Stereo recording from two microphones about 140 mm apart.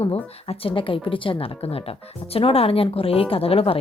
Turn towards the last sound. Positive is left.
turn(degrees=45)  # may be behind; listen again after turning